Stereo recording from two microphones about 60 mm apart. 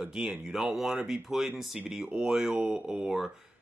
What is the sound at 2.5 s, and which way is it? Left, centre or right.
Speech, centre.